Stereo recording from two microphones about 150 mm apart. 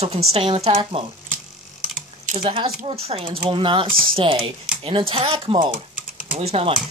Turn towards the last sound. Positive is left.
turn(degrees=-40)  # may be behind; listen again after turning